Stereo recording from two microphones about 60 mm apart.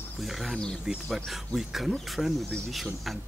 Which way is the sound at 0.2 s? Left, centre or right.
Centre.